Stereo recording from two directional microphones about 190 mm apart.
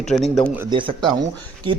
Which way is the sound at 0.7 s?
25° right (ahead or behind).